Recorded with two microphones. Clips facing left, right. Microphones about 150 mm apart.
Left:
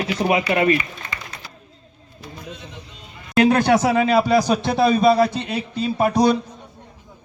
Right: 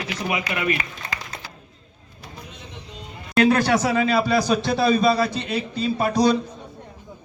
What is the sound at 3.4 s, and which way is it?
A man's voice, 20° left (ahead or behind).